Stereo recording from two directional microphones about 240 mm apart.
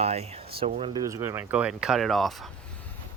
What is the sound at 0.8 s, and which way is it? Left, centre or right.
Speech, centre.